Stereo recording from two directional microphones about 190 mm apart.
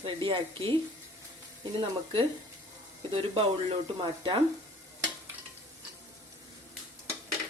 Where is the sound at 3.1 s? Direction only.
30° right (ahead or behind).